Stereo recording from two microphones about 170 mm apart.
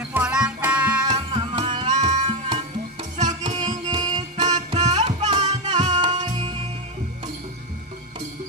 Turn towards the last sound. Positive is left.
turn(degrees=-30)  # may be behind; listen again after turning